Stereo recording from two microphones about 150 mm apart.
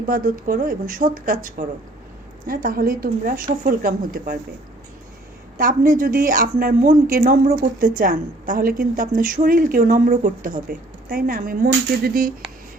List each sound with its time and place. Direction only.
0.1 s a woman's voice: 65° right (ahead or behind)
5.5 s a woman's voice: 65° right (ahead or behind)